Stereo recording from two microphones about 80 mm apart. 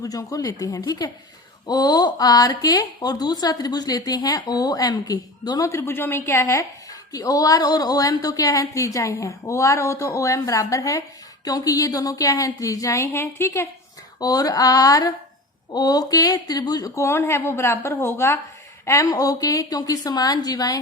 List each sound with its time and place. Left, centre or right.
0.0 s speech: left
1.6 s speech: left
14.2 s speech: left
16.9 s speech: left
18.9 s speech: left